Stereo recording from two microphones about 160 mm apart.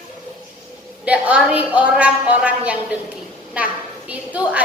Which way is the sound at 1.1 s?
10° right (ahead or behind).